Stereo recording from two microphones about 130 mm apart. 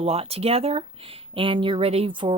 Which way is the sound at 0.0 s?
50° right (ahead or behind).